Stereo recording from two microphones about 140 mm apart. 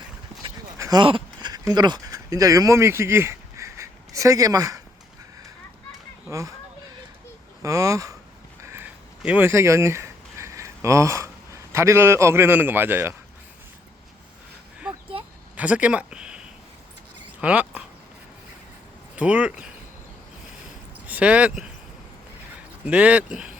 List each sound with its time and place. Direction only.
0.8 s a sound: 25° right (ahead or behind)
1.0 s speech: 35° right (ahead or behind)
7.6 s speech: 25° right (ahead or behind)
8.6 s a sound: 15° right (ahead or behind)
15.5 s speech: 10° right (ahead or behind)
17.4 s speech: 10° right (ahead or behind)
19.1 s speech: 10° right (ahead or behind)
21.1 s speech: 10° right (ahead or behind)
22.9 s speech: 10° right (ahead or behind)